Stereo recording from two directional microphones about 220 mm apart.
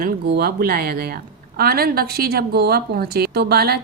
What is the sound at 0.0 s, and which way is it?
Speech, 45° right (ahead or behind).